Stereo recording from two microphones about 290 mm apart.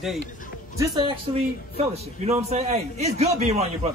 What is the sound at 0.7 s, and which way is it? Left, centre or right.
A man's voice, centre.